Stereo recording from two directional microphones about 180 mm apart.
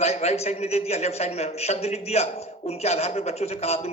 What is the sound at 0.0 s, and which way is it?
A woman's voice, 35° left (ahead or behind).